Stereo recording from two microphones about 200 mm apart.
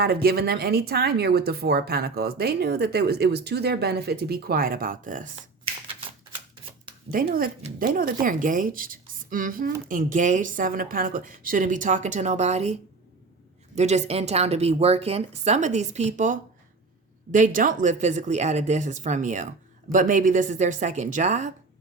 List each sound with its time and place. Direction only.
0.0 s speech: 50° right (ahead or behind)
7.1 s a woman's voice: 45° right (ahead or behind)
13.7 s a woman's voice: 35° right (ahead or behind)